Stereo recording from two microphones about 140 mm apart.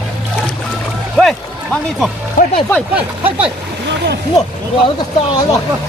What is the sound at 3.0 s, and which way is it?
Speech, 10° right (ahead or behind).